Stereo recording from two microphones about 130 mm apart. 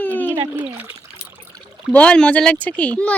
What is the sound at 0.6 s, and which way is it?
Speech, 15° right (ahead or behind).